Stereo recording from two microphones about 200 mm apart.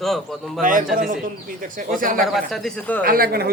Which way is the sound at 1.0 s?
45° right (ahead or behind).